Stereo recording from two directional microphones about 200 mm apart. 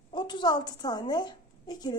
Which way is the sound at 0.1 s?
25° left (ahead or behind).